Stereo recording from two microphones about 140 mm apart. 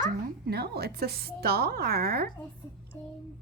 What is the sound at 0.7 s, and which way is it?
A woman's voice, 90° right.